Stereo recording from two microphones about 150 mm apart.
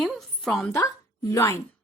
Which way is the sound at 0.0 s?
Centre (ahead or behind).